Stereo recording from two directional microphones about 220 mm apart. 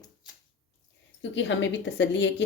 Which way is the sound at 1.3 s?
55° left (ahead or behind).